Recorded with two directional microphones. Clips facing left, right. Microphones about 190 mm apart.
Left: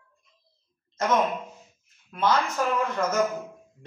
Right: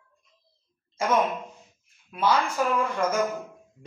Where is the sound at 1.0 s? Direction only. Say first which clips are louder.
Even; 10° right (ahead or behind).